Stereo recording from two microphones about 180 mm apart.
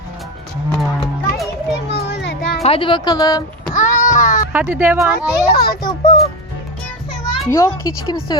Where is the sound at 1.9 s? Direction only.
65° left (ahead or behind).